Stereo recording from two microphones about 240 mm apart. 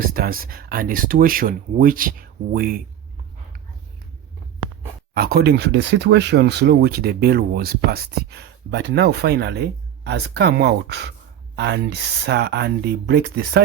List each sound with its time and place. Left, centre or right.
0.1 s speech: right
5.1 s speech: right